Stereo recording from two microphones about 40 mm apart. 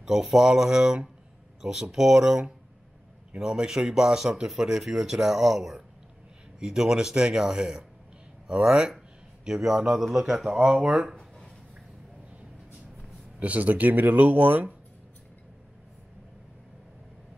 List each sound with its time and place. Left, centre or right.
0.0 s speech: centre
10.8 s speech: right
11.1 s a sound: centre
13.4 s speech: right